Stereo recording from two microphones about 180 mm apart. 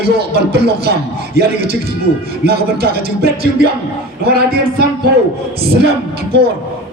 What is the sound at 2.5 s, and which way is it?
Speech, 60° right (ahead or behind).